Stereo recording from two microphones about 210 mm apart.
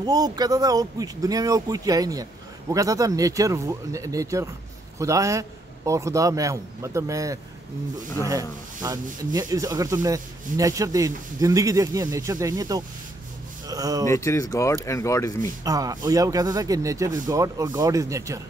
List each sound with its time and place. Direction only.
0.0 s speech: 20° right (ahead or behind)
14.0 s speech: 15° left (ahead or behind)
15.6 s speech: 15° right (ahead or behind)